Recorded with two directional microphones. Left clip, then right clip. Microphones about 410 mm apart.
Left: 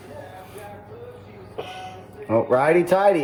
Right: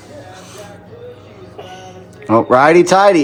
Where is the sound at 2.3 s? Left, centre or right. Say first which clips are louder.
Right 9 dB; right.